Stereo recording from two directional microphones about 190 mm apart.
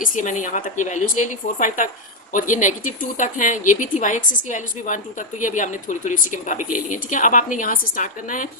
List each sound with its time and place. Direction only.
0.0 s a woman's voice: 40° left (ahead or behind)